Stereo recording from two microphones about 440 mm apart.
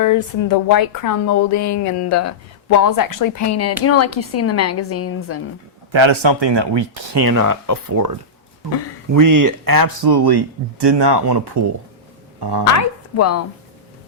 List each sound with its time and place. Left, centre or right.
0.0 s speech: left
5.9 s speech: right
7.2 s speech: right
9.1 s speech: right
12.7 s speech: left